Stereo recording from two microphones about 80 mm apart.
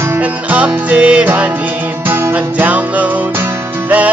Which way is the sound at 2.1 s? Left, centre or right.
Right.